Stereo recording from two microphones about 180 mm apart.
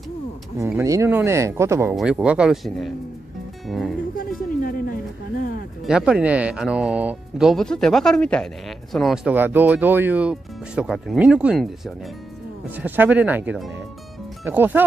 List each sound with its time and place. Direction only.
0.7 s speech: 15° right (ahead or behind); by 2.9 s centre (ahead or behind)
3.6 s music: centre (ahead or behind)
4.2 s a sound: 50° left (ahead or behind)
5.9 s speech: 5° right (ahead or behind)